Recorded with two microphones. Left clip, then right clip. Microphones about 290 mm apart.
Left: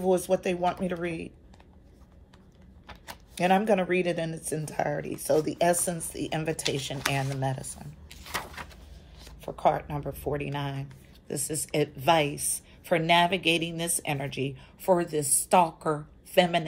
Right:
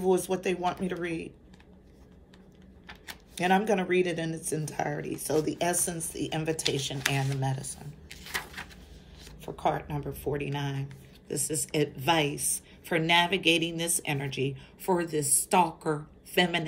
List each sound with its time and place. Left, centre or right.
0.0 s a woman's voice: centre
2.9 s speech: centre
7.8 s a sound: centre
9.2 s a woman's voice: centre